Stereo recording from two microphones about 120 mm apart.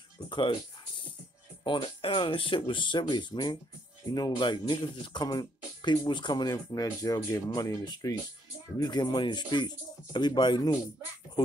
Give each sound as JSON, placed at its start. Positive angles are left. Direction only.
{"t": 0.3, "sound": "speech", "side_deg": 40}